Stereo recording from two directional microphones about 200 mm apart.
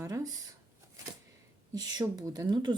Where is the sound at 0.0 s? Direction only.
15° right (ahead or behind).